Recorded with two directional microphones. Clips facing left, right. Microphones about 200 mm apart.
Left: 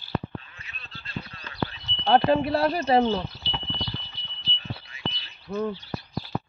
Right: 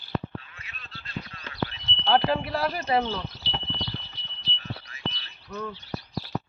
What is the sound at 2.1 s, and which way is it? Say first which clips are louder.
Speech: left 4 dB; 25° left (ahead or behind).